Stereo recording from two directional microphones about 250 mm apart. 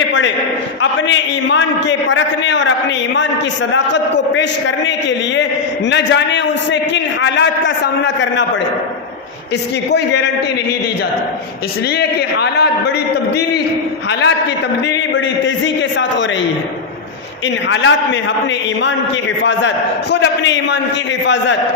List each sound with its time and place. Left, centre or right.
0.8 s a man's voice: left
9.9 s a man's voice: left
11.9 s a man's voice: left
14.1 s a man's voice: left
15.4 s a man's voice: left
17.7 s a man's voice: left
19.5 s a man's voice: left